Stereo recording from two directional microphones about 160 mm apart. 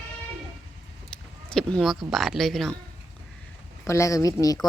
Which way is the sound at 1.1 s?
5° left (ahead or behind).